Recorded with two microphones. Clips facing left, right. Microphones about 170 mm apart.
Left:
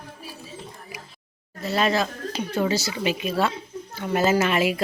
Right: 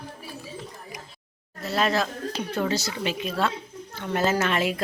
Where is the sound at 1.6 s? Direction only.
Centre (ahead or behind).